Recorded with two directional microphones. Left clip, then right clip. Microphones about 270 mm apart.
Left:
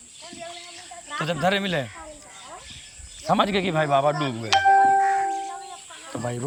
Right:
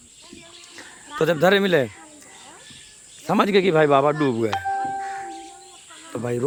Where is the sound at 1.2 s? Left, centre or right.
Centre.